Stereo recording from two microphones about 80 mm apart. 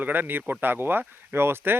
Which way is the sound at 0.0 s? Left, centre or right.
Right.